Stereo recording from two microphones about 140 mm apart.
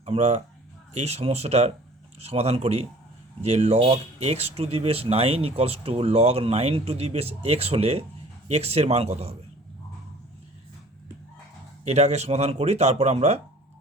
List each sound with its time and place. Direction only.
0.0 s speech: 50° right (ahead or behind)
11.9 s speech: 50° right (ahead or behind)